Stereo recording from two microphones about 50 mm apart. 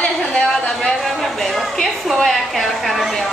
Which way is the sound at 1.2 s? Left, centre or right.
Centre.